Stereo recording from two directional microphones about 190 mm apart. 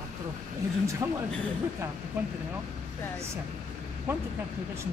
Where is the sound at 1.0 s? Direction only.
15° right (ahead or behind).